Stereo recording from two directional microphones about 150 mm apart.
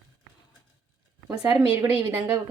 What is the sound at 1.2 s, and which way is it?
A woman's voice, 10° right (ahead or behind).